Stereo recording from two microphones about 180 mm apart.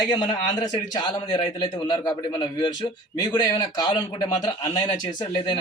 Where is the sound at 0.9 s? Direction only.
25° left (ahead or behind).